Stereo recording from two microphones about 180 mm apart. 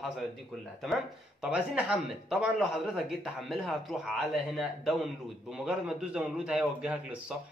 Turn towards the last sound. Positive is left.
turn(degrees=-5)  # may be behind; listen again after turning